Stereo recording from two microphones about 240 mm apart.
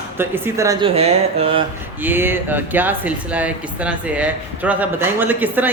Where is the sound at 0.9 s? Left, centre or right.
Right.